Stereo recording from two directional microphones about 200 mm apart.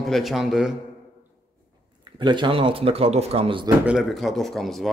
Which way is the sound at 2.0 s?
25° right (ahead or behind).